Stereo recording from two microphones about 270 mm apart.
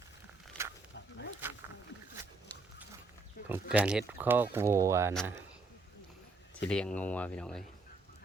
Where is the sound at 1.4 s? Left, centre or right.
Centre.